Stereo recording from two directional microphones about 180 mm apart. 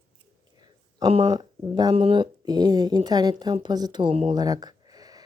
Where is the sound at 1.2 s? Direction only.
20° right (ahead or behind).